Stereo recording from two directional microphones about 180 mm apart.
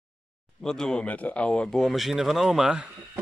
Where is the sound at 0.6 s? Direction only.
5° left (ahead or behind).